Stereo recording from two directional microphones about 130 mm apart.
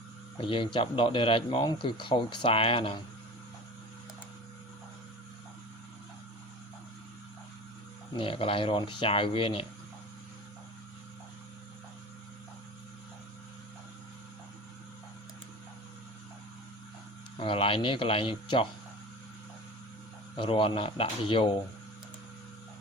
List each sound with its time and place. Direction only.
0.3 s speech: 40° left (ahead or behind)
8.1 s speech: 40° left (ahead or behind)
17.4 s speech: 45° left (ahead or behind)
20.3 s speech: 40° left (ahead or behind)